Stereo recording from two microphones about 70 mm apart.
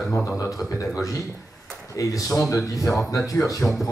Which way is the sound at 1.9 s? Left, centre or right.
Left.